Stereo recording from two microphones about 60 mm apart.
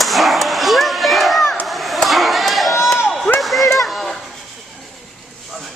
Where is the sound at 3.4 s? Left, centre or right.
Centre.